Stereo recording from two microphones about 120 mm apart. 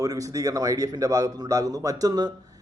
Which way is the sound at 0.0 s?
30° right (ahead or behind).